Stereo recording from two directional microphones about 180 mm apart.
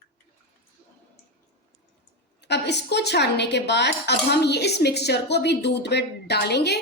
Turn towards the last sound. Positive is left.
turn(degrees=65)  # may be behind; listen again after turning